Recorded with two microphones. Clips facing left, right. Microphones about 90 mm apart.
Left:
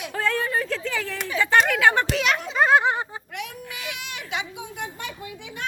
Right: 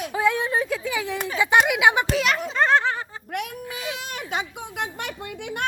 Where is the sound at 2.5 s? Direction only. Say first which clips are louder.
Left 2 dB; 5° left (ahead or behind).